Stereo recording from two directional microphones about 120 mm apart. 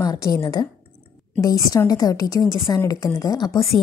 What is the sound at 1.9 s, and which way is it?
A woman's voice, 30° left (ahead or behind).